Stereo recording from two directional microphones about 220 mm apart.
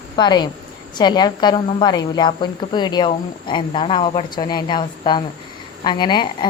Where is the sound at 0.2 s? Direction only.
20° left (ahead or behind).